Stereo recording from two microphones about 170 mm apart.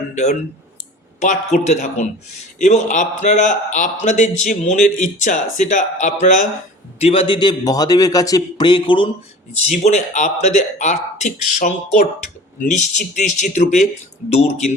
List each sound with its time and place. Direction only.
1.2 s a man's voice: 45° left (ahead or behind)
7.0 s a man's voice: 35° left (ahead or behind)
9.6 s a man's voice: 40° left (ahead or behind)